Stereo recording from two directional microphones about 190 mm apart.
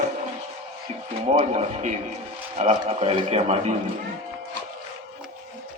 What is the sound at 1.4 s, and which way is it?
Speech, 40° right (ahead or behind).